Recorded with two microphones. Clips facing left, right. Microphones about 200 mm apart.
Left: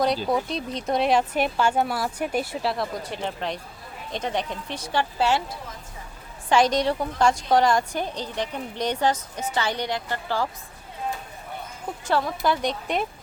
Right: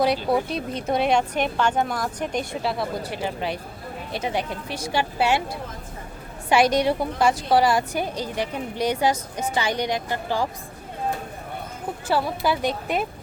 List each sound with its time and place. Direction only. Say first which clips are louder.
0.3 s a woman's voice: right 2 dB; 5° right (ahead or behind)
6.5 s a woman's voice: right 1 dB; 10° right (ahead or behind)
12.0 s speech: even; 5° right (ahead or behind)